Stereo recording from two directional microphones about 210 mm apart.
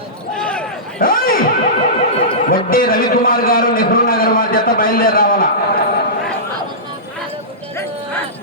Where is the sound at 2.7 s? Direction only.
45° left (ahead or behind).